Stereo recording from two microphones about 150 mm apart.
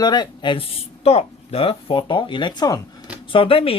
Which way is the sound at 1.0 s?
40° left (ahead or behind).